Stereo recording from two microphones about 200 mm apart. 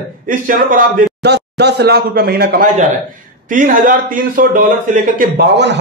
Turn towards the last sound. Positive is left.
turn(degrees=-60)  # may be behind; listen again after turning